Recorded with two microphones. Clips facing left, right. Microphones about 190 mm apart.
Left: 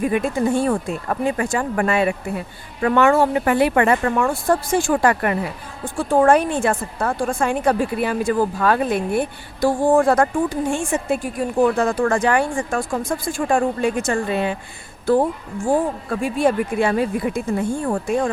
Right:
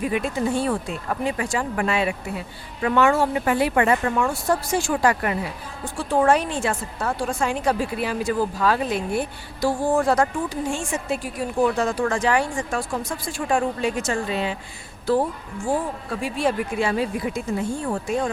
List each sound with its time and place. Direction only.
0.0 s a woman's voice: 50° left (ahead or behind)